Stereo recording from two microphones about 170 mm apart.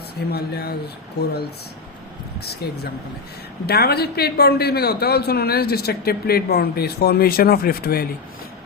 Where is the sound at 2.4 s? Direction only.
70° left (ahead or behind).